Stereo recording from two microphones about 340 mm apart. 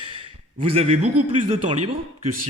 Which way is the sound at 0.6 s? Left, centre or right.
Centre.